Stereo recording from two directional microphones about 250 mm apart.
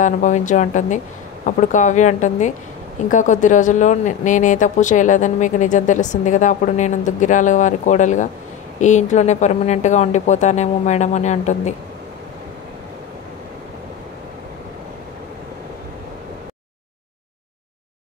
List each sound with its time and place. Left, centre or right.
0.0 s speech: left